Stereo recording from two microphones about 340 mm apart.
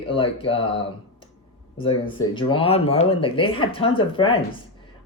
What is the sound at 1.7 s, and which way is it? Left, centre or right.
Speech, centre.